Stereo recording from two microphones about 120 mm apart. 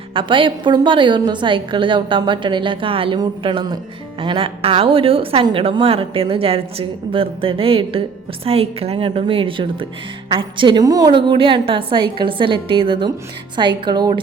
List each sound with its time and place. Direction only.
0.1 s a woman's voice: 45° right (ahead or behind)
10.8 s speech: 30° right (ahead or behind)
11.1 s a woman's voice: 45° right (ahead or behind)